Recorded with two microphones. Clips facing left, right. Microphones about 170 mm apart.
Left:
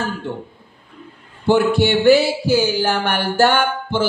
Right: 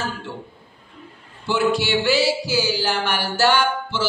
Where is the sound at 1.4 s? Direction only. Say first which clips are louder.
Left 6 dB; 55° left (ahead or behind).